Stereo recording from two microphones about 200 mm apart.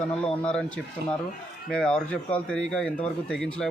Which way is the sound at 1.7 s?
5° left (ahead or behind).